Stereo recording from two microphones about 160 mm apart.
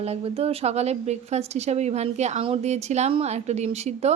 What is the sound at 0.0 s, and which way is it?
A woman's voice, 40° right (ahead or behind).